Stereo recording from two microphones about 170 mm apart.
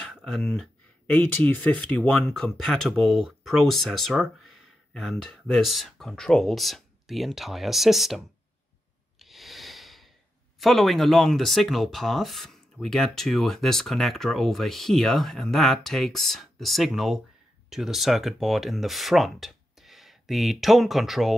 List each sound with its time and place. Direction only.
0.0 s speech: centre (ahead or behind)
9.2 s snort: centre (ahead or behind)
10.6 s speech: centre (ahead or behind)